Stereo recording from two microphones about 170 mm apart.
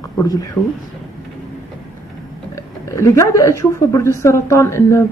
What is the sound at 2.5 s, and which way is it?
A woman's voice, 15° left (ahead or behind).